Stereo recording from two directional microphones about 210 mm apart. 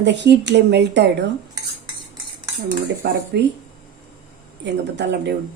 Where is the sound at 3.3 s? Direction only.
55° right (ahead or behind).